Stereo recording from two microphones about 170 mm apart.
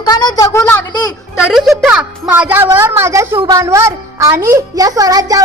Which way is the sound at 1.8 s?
5° right (ahead or behind).